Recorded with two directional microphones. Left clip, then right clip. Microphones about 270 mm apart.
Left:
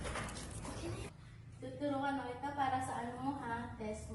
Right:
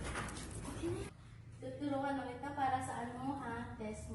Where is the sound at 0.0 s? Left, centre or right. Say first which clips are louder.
Left 1 dB; centre.